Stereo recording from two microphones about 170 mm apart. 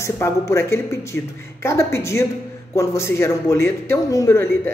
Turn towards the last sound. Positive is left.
turn(degrees=15)  # may be behind; listen again after turning